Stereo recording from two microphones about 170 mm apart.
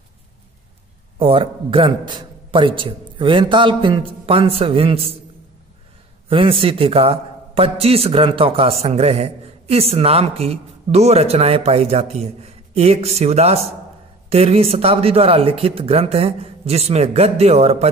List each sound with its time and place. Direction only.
1.2 s a man's voice: 30° right (ahead or behind)
6.2 s a man's voice: 30° right (ahead or behind)